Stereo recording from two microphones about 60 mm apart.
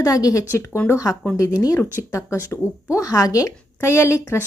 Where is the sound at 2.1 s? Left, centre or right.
Left.